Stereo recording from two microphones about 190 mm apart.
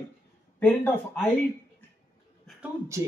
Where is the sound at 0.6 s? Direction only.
10° left (ahead or behind).